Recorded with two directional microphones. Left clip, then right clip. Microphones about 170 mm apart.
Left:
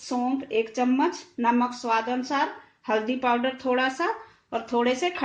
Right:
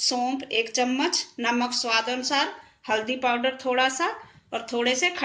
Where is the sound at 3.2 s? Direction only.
55° left (ahead or behind).